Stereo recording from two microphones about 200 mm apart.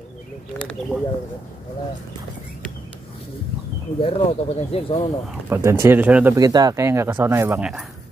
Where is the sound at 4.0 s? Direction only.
30° left (ahead or behind).